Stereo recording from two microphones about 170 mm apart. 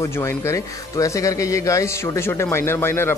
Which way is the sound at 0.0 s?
15° left (ahead or behind).